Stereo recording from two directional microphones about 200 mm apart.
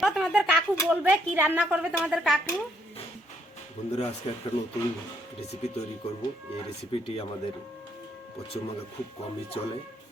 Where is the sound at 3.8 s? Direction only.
35° left (ahead or behind).